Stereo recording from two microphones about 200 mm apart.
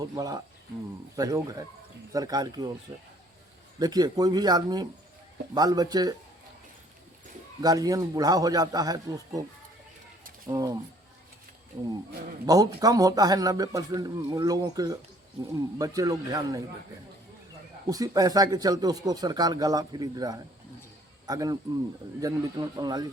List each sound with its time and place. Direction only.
0.0 s speech: 20° right (ahead or behind)
3.8 s speech: 20° right (ahead or behind)
7.6 s speech: 20° right (ahead or behind)
10.5 s speech: 20° right (ahead or behind)
12.5 s speech: 20° right (ahead or behind)
17.8 s speech: 20° right (ahead or behind)